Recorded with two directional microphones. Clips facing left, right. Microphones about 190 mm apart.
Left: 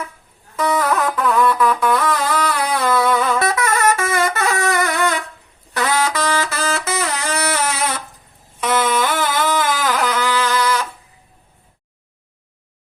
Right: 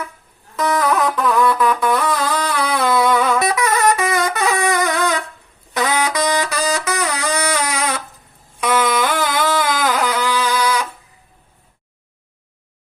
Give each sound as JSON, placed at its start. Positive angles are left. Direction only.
{"t": 0.6, "sound": "music", "side_deg": 5}
{"t": 1.8, "sound": "music", "side_deg": -15}
{"t": 2.8, "sound": "wind instrument", "side_deg": -15}
{"t": 5.7, "sound": "music", "side_deg": -15}